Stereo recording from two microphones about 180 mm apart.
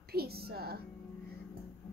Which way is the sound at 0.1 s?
60° right (ahead or behind).